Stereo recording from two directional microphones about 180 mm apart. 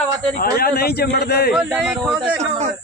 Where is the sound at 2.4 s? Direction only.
40° right (ahead or behind).